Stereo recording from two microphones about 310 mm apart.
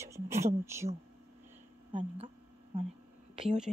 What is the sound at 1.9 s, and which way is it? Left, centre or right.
Speech, centre.